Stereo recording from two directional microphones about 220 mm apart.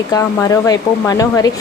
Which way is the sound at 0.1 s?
15° left (ahead or behind).